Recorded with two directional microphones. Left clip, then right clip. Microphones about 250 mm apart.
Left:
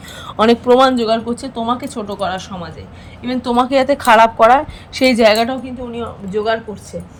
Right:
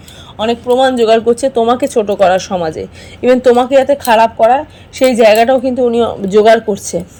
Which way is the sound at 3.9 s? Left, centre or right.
Left.